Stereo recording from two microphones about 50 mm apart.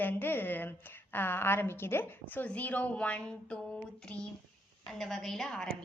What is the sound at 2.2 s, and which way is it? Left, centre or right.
A woman's voice, left.